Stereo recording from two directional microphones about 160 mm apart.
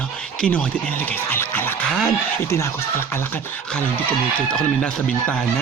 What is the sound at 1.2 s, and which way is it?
Music, 15° left (ahead or behind).